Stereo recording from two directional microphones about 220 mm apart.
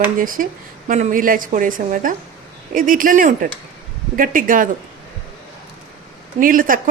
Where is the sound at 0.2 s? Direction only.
40° right (ahead or behind).